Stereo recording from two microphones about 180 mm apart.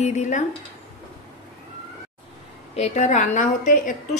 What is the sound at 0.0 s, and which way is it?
Speech, 40° left (ahead or behind).